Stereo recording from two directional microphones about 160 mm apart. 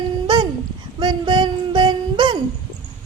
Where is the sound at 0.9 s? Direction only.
30° right (ahead or behind).